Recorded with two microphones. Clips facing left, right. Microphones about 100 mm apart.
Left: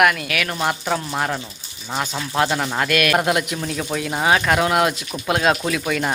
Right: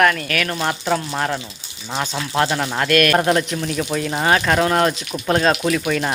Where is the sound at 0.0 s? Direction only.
10° left (ahead or behind).